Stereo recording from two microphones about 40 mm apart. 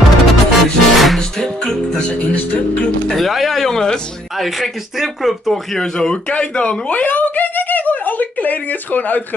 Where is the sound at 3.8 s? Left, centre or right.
Centre.